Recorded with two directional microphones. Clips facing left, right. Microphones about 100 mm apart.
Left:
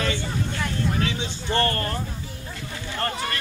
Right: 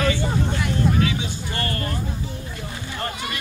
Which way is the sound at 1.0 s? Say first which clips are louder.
Right 3 dB; 30° left (ahead or behind).